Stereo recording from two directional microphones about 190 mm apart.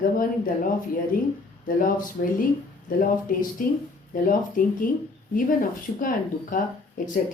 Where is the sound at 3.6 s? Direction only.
45° left (ahead or behind).